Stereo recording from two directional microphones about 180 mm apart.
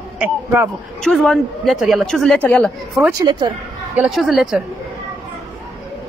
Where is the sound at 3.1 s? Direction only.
25° right (ahead or behind).